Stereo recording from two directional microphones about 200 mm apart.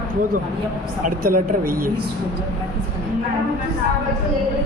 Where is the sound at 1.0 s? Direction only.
45° right (ahead or behind).